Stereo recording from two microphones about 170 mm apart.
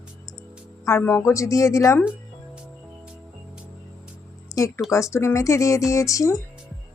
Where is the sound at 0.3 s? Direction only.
Centre (ahead or behind).